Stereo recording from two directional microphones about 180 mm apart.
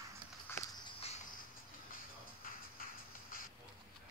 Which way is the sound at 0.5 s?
10° left (ahead or behind).